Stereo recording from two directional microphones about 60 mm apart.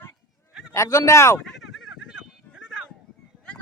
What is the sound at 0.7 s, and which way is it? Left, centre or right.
Speech, left.